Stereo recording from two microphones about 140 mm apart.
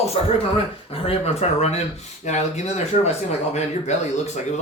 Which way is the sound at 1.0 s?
45° left (ahead or behind).